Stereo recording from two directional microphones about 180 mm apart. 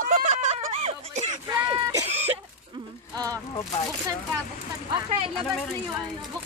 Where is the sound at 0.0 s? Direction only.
45° right (ahead or behind).